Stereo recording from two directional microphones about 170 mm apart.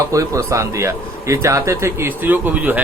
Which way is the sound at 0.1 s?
20° right (ahead or behind).